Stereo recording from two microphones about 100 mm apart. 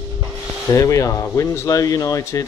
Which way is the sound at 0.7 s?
30° left (ahead or behind).